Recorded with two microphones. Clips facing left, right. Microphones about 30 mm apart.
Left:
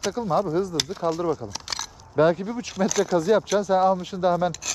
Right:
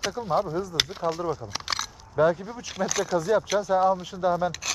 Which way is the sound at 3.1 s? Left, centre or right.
Left.